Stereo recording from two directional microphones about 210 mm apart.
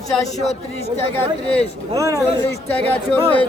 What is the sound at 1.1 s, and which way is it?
Speech, 5° left (ahead or behind).